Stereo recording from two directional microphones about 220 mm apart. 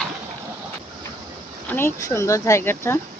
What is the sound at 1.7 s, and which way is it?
Speech, 10° left (ahead or behind).